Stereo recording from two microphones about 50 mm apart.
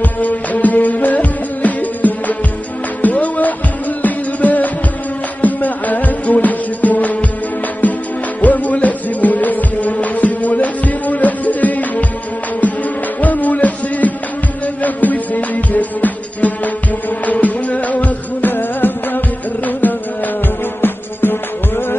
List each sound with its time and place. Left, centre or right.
0.0 s music: left
8.4 s music: left
13.2 s music: left